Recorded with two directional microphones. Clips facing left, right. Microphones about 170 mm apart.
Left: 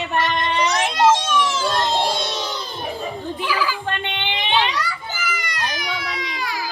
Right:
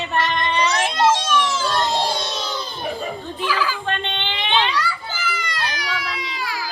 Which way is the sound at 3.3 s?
10° left (ahead or behind).